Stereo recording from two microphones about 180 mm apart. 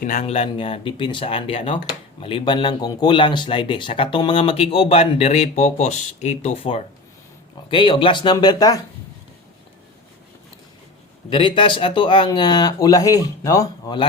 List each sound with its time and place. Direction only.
0.0 s speech: 40° left (ahead or behind); by 8.8 s 20° left (ahead or behind)
11.3 s speech: 25° left (ahead or behind)